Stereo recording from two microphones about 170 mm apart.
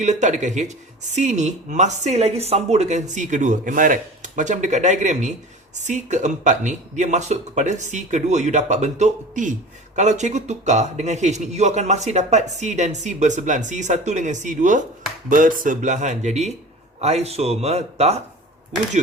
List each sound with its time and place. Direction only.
0.0 s speech: 45° right (ahead or behind)